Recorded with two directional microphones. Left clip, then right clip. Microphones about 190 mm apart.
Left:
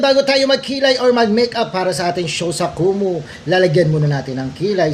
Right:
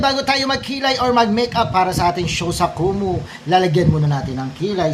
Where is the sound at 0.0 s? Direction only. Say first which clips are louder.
Left 4 dB; 15° right (ahead or behind).